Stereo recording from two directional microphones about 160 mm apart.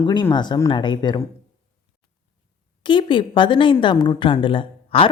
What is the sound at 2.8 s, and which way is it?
Speech, 30° left (ahead or behind).